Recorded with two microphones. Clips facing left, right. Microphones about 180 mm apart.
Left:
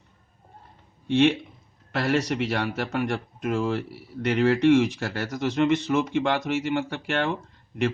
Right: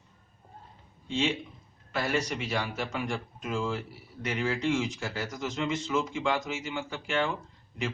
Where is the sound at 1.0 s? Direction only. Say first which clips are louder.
Left 9 dB; 65° left (ahead or behind).